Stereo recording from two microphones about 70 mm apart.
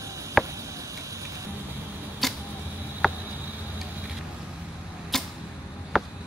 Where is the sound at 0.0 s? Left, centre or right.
Right.